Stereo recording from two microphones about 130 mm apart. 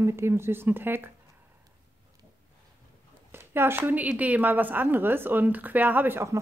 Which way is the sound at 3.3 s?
15° right (ahead or behind).